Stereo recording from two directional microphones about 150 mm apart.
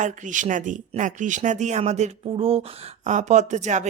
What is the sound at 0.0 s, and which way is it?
Speech, 60° right (ahead or behind).